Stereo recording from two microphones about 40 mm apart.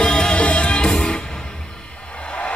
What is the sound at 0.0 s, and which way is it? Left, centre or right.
Music, left.